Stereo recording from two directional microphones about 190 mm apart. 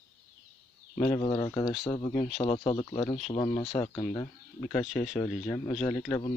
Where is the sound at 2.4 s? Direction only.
30° left (ahead or behind).